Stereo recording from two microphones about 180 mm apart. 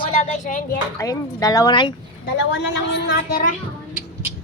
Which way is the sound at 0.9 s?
20° left (ahead or behind).